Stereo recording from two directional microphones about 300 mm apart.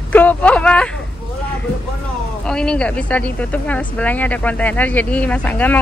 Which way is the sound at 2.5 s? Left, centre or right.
Centre.